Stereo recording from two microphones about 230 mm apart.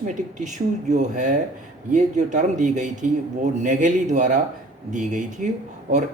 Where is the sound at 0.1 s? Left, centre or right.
Right.